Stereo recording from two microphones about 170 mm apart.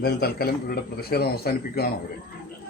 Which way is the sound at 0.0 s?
65° left (ahead or behind).